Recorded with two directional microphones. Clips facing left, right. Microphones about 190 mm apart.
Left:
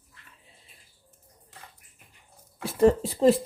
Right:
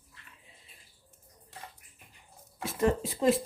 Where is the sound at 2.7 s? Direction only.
30° left (ahead or behind).